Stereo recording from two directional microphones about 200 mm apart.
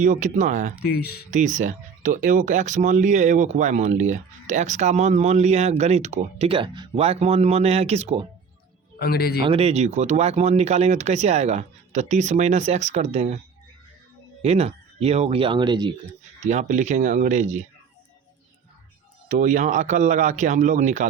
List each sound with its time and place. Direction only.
0.0 s speech: 40° right (ahead or behind)
0.8 s speech: 50° left (ahead or behind)
1.3 s speech: 35° right (ahead or behind)
9.0 s a man's voice: 50° left (ahead or behind)
9.5 s speech: 30° right (ahead or behind)
14.4 s speech: 30° right (ahead or behind)
16.4 s speech: 35° right (ahead or behind)
19.3 s speech: 40° right (ahead or behind)